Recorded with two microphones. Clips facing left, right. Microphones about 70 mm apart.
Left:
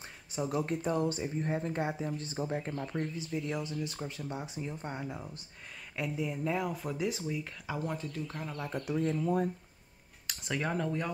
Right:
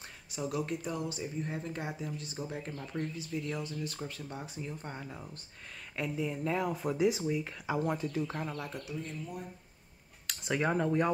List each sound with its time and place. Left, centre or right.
0.3 s speech: left; by 8.3 s centre
8.8 s speech: left
10.5 s speech: centre